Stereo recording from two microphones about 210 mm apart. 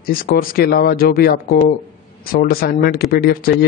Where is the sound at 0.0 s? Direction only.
45° left (ahead or behind).